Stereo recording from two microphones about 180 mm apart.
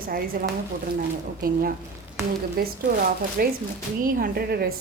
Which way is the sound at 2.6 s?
55° right (ahead or behind).